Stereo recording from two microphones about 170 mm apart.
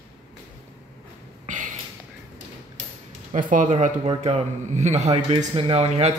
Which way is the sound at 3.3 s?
50° right (ahead or behind).